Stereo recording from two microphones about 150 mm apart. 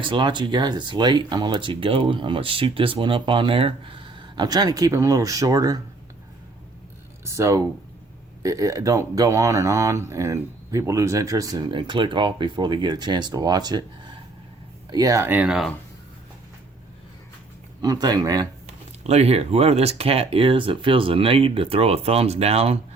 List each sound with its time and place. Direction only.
0.0 s speech: 30° right (ahead or behind)
7.3 s speech: 20° right (ahead or behind)
14.8 s speech: 25° right (ahead or behind); by 15.7 s 5° right (ahead or behind)
17.8 s speech: 25° right (ahead or behind)
18.6 s speech: 45° right (ahead or behind)